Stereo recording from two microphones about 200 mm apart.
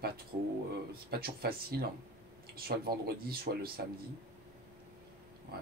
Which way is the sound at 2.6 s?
50° right (ahead or behind).